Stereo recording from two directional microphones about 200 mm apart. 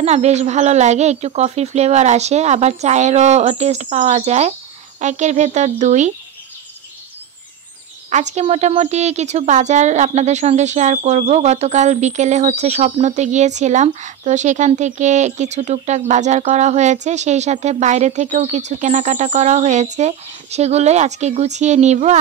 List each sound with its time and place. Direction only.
0.0 s a woman's voice: 35° right (ahead or behind)
8.1 s a woman's voice: 35° right (ahead or behind)